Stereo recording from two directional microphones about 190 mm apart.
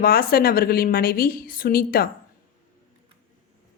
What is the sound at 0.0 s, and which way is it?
A woman's voice, 50° left (ahead or behind).